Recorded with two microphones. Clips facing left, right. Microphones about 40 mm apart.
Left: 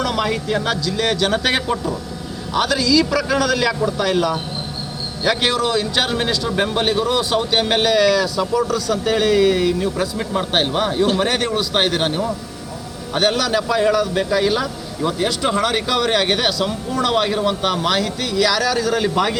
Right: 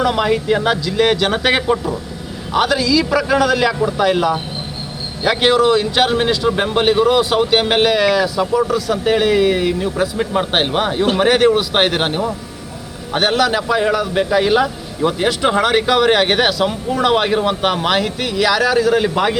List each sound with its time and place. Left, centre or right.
0.0 s speech: centre